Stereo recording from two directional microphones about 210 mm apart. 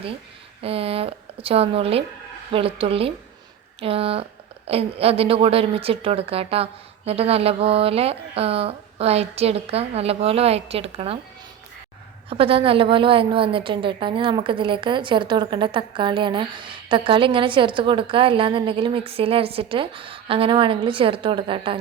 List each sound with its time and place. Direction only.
0.6 s a woman's voice: 25° right (ahead or behind)
12.3 s a woman's voice: 25° right (ahead or behind)